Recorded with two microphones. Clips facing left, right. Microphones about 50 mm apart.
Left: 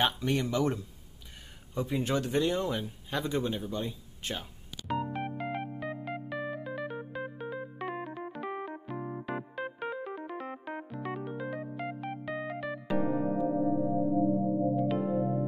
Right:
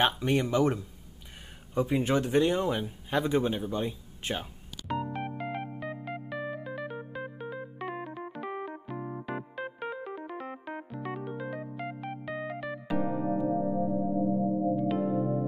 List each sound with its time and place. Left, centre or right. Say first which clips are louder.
0.0 s speech: right 3 dB; centre
1.8 s speech: right 4 dB; right
4.8 s keyboard: even; centre
13.5 s music: even; centre